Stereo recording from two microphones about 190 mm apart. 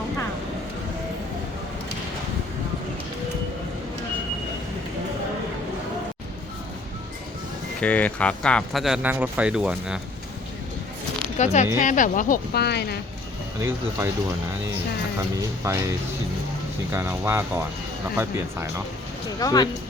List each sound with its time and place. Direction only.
7.8 s speech: 5° left (ahead or behind)
11.3 s speech: 40° left (ahead or behind); by 13.0 s 60° left (ahead or behind)
13.6 s speech: 15° right (ahead or behind)
15.4 s speech: 15° right (ahead or behind)
19.4 s speech: 20° left (ahead or behind)